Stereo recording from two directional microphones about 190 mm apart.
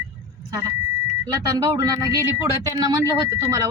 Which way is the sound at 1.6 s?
20° right (ahead or behind).